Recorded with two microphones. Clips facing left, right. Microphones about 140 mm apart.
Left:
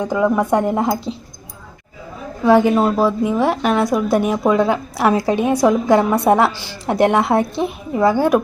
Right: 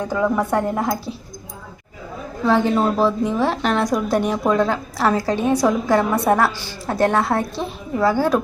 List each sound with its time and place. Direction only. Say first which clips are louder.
0.0 s a woman's voice: left 3 dB; 15° left (ahead or behind)
2.4 s a woman's voice: left 4 dB; 10° left (ahead or behind)